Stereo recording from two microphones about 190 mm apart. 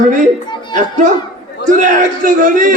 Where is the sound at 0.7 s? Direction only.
40° right (ahead or behind).